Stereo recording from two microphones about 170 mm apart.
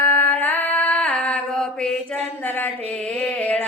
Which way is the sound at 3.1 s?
5° left (ahead or behind).